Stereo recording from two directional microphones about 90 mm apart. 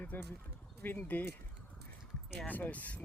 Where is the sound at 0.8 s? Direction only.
20° left (ahead or behind).